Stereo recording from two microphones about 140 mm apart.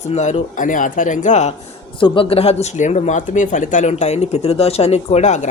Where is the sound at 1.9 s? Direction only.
40° left (ahead or behind).